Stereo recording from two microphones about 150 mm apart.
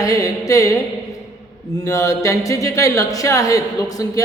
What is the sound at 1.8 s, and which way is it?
Speech, 20° left (ahead or behind).